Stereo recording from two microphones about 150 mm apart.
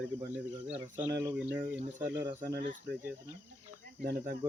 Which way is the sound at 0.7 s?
10° right (ahead or behind).